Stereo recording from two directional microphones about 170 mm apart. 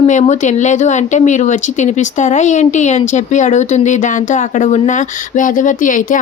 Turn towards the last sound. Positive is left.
turn(degrees=50)  # may be behind; listen again after turning